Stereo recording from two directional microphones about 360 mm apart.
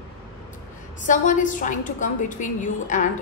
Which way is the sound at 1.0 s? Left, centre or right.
Left.